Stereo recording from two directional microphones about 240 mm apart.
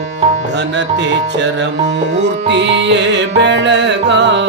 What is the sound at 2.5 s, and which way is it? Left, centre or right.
Music, right.